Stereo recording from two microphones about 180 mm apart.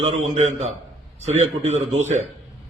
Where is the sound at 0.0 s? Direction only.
40° right (ahead or behind).